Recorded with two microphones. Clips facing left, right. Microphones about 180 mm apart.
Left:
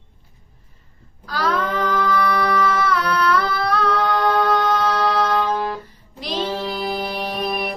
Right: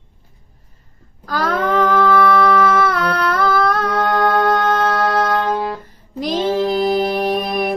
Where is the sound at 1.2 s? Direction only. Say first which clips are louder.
Right 3 dB; 50° right (ahead or behind).